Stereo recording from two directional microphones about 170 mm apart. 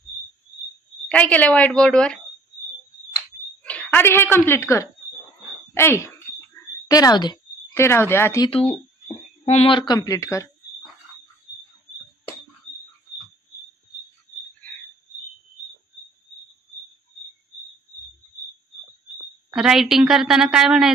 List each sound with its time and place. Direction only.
1.0 s a woman's voice: 10° left (ahead or behind)
3.6 s speech: 10° left (ahead or behind)
5.8 s a sound: 15° left (ahead or behind)
9.5 s speech: 35° left (ahead or behind); by 10.5 s 20° left (ahead or behind)
19.5 s a woman's voice: 5° right (ahead or behind)